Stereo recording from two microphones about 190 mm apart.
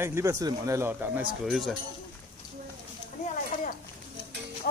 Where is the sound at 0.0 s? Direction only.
15° right (ahead or behind).